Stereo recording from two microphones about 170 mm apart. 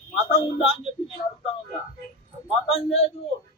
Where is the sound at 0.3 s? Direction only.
35° left (ahead or behind).